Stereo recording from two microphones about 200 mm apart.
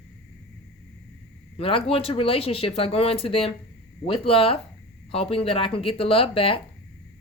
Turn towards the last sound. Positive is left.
turn(degrees=30)  # may be behind; listen again after turning